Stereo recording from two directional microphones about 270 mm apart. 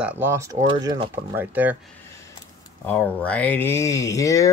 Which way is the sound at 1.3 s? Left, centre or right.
Centre.